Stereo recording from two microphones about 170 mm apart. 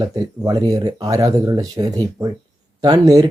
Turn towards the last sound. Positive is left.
turn(degrees=-20)  # may be behind; listen again after turning